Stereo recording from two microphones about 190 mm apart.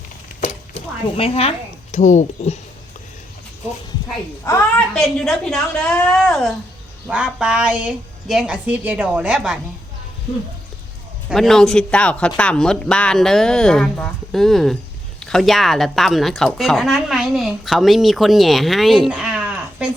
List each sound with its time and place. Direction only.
1.1 s speech: 30° left (ahead or behind)
4.4 s a woman's voice: 10° left (ahead or behind)
4.9 s speech: centre (ahead or behind)
11.3 s speech: centre (ahead or behind)